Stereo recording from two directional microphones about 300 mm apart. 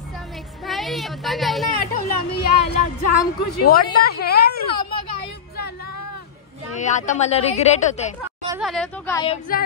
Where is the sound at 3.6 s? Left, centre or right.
Left.